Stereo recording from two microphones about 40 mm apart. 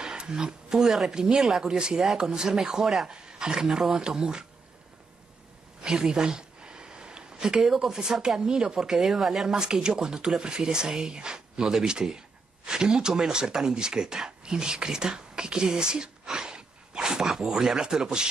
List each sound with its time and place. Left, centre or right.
0.0 s a sound: centre
1.1 s speech: centre
3.1 s speech: centre
5.8 s a sound: centre
7.3 s speech: centre
9.6 s speech: centre